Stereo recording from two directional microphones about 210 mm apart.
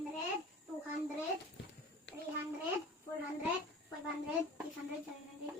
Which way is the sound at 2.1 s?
60° left (ahead or behind).